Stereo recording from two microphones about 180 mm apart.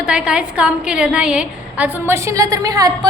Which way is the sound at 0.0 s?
5° right (ahead or behind).